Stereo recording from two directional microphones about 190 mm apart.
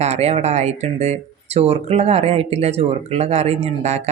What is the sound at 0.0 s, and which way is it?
Speech, 35° right (ahead or behind).